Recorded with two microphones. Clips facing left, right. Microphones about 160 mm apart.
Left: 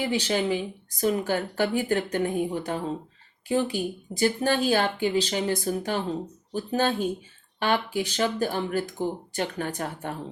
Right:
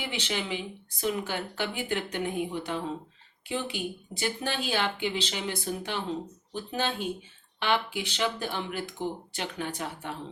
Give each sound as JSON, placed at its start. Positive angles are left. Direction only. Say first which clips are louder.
{"t": 0.0, "sound": "speech", "louder": "left 8 dB", "side_deg": 40}